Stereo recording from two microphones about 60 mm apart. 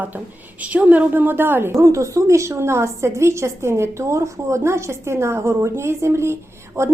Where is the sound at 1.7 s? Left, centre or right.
Right.